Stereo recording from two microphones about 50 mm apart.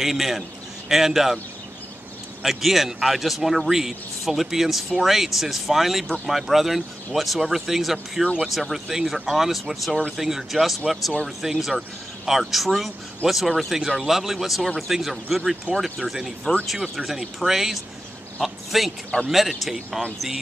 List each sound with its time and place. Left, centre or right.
0.0 s a man's voice: centre
2.4 s a man's voice: centre